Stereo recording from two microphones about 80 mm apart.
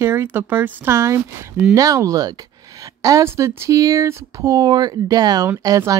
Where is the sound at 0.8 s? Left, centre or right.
Right.